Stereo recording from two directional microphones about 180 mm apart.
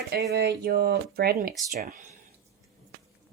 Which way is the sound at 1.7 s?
50° right (ahead or behind).